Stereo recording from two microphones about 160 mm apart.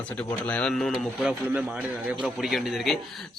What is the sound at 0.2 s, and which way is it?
A man's voice, 10° left (ahead or behind).